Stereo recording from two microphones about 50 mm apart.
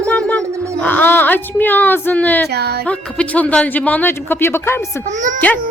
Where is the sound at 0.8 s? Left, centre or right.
Left.